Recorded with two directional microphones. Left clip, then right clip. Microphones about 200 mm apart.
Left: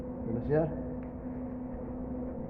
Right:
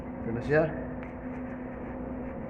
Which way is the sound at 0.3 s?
15° right (ahead or behind).